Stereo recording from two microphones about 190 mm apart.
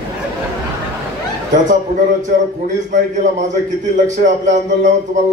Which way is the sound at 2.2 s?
40° right (ahead or behind).